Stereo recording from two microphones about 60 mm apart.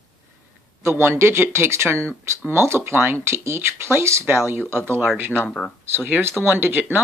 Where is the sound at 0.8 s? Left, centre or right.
Right.